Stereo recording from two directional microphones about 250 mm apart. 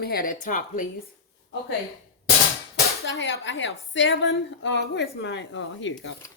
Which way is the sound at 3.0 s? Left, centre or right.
Left.